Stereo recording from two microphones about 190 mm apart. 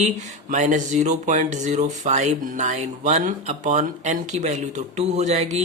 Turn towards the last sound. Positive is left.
turn(degrees=-35)  # may be behind; listen again after turning